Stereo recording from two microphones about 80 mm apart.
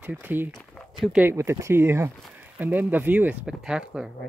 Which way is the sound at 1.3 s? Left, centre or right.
Right.